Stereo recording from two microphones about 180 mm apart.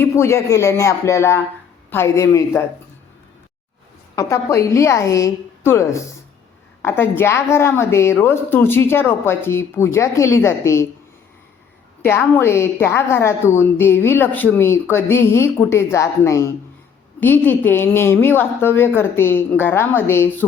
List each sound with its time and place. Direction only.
0.0 s a woman's voice: 15° left (ahead or behind)
4.1 s a woman's voice: 20° left (ahead or behind)
12.0 s a woman's voice: 10° left (ahead or behind)